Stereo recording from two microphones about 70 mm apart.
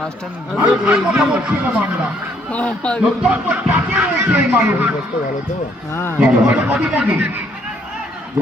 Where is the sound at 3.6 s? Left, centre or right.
Right.